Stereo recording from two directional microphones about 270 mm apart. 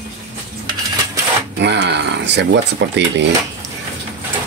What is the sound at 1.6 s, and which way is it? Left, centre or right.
Speech, right.